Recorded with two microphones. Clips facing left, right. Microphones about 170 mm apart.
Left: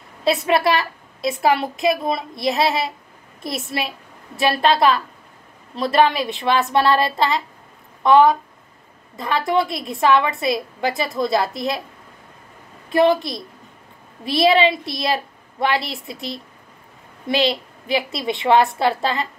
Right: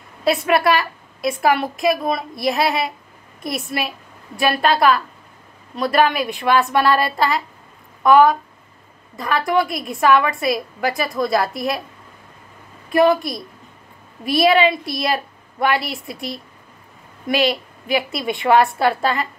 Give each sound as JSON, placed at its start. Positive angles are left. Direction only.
{"t": 0.5, "sound": "a woman's voice", "side_deg": 25}
{"t": 12.9, "sound": "a woman's voice", "side_deg": 25}